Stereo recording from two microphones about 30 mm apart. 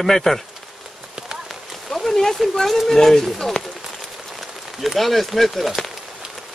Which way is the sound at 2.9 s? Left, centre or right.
Centre.